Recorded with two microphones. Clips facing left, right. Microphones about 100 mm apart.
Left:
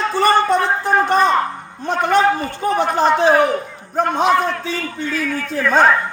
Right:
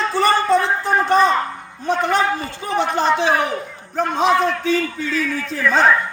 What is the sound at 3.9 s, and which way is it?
A man's voice, 50° left (ahead or behind).